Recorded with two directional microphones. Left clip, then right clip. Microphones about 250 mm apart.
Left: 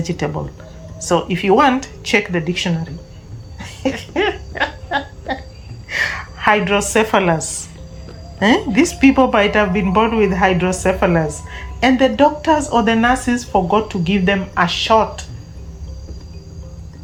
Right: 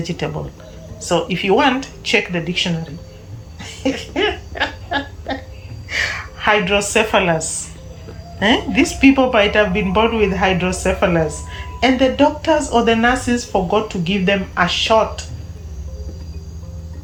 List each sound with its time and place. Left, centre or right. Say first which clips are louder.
0.0 s speech: left 2 dB; centre
3.6 s laughter: even; centre
5.9 s a woman's voice: left 1 dB; centre